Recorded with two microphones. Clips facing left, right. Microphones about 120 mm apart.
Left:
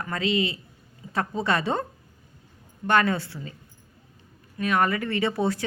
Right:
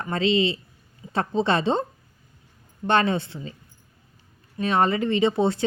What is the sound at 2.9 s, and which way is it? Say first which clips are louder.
Speech: right 1 dB; 25° right (ahead or behind).